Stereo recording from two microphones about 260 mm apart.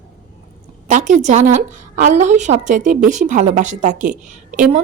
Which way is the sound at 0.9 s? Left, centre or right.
Right.